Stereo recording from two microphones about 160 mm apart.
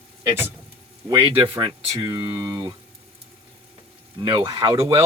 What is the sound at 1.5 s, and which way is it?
Speech, 30° right (ahead or behind).